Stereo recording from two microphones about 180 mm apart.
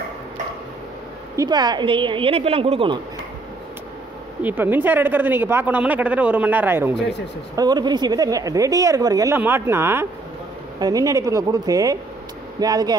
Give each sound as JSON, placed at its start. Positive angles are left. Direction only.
{"t": 1.3, "sound": "speech", "side_deg": -20}
{"t": 4.4, "sound": "speech", "side_deg": -10}
{"t": 7.0, "sound": "speech", "side_deg": 70}
{"t": 7.5, "sound": "speech", "side_deg": -25}